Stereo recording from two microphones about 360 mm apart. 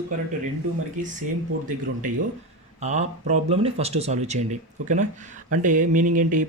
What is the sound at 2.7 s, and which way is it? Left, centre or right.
Speech, centre.